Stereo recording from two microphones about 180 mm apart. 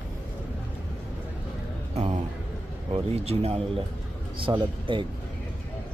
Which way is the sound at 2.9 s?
35° right (ahead or behind).